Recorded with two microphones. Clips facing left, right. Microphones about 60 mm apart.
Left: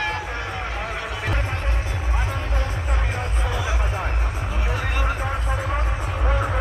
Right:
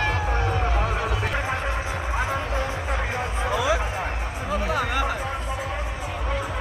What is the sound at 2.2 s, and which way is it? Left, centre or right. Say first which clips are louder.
Music: right 3 dB; centre.